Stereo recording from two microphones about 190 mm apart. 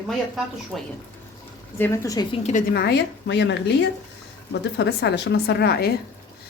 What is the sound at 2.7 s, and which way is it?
A woman's voice, 60° left (ahead or behind).